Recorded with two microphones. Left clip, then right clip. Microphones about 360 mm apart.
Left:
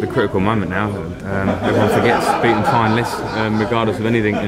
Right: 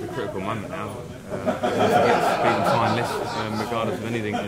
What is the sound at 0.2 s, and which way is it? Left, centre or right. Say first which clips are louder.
Speech: left 12 dB; left.